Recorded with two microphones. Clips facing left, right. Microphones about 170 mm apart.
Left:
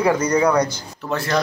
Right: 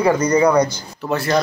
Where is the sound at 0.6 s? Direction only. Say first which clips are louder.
Right 3 dB; 15° right (ahead or behind).